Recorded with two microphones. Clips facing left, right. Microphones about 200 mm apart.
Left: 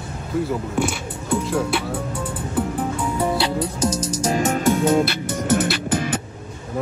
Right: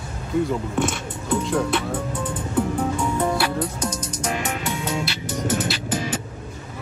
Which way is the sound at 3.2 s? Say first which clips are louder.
Left 3 dB; 20° left (ahead or behind).